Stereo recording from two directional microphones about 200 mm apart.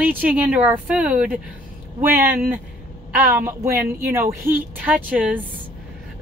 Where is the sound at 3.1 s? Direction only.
10° right (ahead or behind).